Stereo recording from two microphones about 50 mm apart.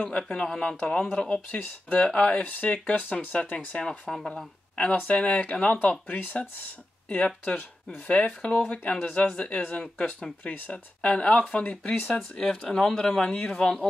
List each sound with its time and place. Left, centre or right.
0.0 s a man's voice: centre
1.3 s speech: left
2.0 s speech: left
4.1 s speech: centre
4.9 s speech: left
6.1 s speech: left
7.1 s a man's voice: left